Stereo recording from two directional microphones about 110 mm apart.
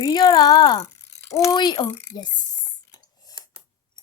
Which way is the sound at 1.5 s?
45° left (ahead or behind).